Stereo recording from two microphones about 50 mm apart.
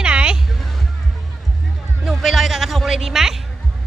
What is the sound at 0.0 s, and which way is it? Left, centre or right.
Music, centre.